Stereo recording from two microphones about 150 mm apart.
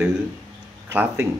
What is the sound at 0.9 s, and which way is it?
Speech, 10° right (ahead or behind).